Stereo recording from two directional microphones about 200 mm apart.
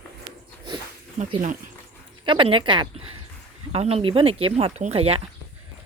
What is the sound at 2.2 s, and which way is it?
Speech, 25° right (ahead or behind).